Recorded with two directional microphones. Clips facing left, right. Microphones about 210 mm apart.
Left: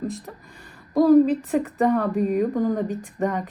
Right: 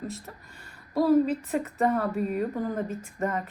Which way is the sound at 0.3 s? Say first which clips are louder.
Left 5 dB; centre (ahead or behind).